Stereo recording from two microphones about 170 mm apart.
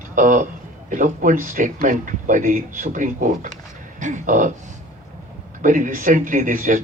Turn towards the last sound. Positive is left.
turn(degrees=-50)  # may be behind; listen again after turning